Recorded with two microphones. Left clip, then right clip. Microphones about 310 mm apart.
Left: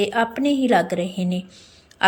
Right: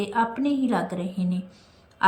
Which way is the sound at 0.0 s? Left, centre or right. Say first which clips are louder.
Left 4 dB; centre.